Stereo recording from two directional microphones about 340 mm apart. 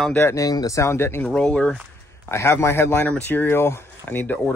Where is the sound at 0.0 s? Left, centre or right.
Centre.